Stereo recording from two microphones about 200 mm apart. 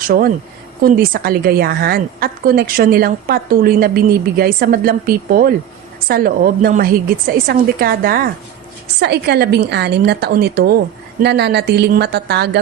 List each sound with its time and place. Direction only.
0.8 s a woman's voice: 45° right (ahead or behind)